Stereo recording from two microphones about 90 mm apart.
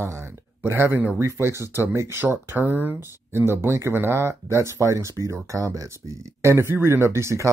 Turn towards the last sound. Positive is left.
turn(degrees=-30)  # may be behind; listen again after turning